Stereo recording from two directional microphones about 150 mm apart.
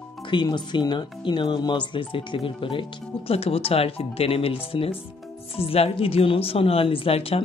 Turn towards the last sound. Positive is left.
turn(degrees=40)  # may be behind; listen again after turning